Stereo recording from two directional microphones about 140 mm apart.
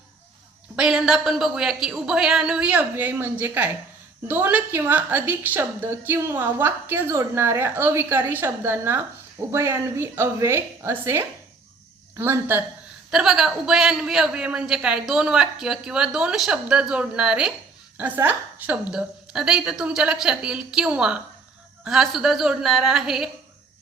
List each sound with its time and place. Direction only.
0.8 s a man's voice: 5° right (ahead or behind)
13.1 s a man's voice: 5° right (ahead or behind)